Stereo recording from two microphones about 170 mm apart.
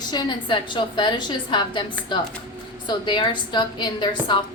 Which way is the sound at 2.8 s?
25° left (ahead or behind).